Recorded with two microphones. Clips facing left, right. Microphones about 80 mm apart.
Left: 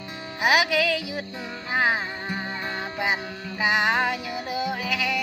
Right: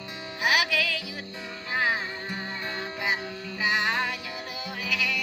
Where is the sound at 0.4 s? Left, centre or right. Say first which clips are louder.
Left 5 dB; centre.